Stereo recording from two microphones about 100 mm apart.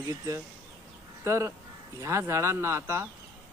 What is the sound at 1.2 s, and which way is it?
Speech, 30° right (ahead or behind).